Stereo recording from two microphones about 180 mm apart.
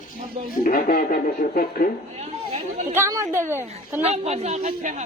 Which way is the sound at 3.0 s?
15° right (ahead or behind).